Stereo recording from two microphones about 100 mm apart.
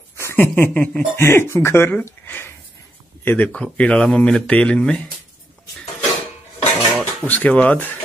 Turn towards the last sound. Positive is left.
turn(degrees=15)  # may be behind; listen again after turning